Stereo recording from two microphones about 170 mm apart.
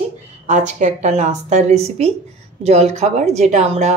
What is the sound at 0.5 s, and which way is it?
Speech, 45° right (ahead or behind).